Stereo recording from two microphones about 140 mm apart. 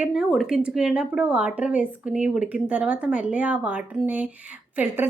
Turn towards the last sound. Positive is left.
turn(degrees=-15)  # may be behind; listen again after turning